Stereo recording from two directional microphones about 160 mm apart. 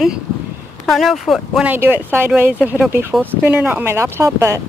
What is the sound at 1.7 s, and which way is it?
Speech, 10° right (ahead or behind).